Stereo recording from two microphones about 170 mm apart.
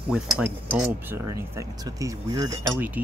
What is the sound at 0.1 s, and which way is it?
Speech, 10° right (ahead or behind).